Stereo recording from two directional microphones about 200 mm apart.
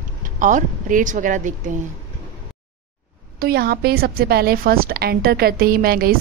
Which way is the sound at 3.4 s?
50° right (ahead or behind).